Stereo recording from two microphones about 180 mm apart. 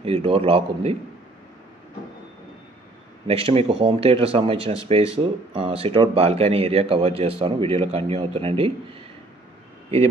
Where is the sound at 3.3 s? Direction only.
35° right (ahead or behind).